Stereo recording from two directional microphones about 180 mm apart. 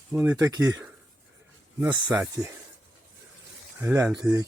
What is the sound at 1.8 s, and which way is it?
Speech, 10° right (ahead or behind).